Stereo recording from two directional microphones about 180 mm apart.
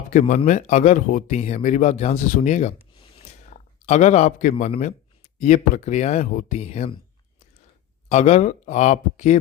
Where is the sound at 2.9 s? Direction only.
35° left (ahead or behind).